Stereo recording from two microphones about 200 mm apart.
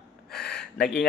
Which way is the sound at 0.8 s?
5° left (ahead or behind).